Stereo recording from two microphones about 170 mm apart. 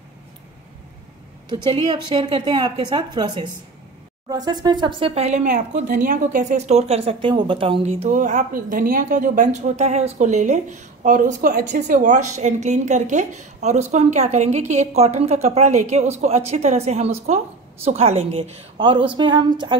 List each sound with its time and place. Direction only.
1.7 s a woman's voice: 25° right (ahead or behind)